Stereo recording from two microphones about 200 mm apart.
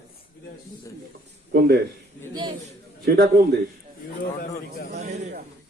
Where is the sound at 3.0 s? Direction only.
55° right (ahead or behind).